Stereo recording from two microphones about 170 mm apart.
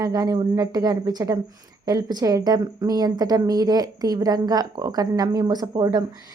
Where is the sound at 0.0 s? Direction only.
20° right (ahead or behind).